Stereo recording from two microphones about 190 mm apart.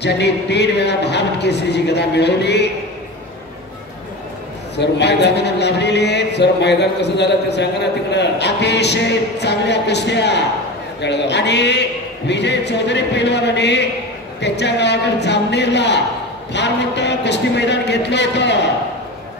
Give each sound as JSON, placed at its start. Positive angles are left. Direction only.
{"t": 0.0, "sound": "a man's voice", "side_deg": 65}
{"t": 4.7, "sound": "a man's voice", "side_deg": 65}